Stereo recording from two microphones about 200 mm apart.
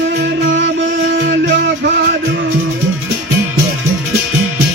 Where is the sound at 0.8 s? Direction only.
55° right (ahead or behind).